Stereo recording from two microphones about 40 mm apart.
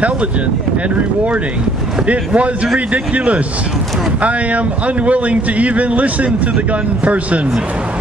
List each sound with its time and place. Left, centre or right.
2.0 s speech: right
4.2 s speech: right